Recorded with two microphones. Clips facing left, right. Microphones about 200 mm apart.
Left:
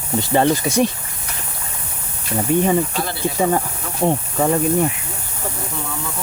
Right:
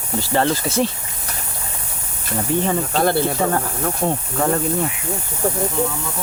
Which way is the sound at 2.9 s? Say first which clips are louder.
Right 8 dB; 55° right (ahead or behind).